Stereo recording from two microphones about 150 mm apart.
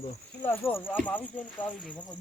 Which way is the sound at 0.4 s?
15° left (ahead or behind).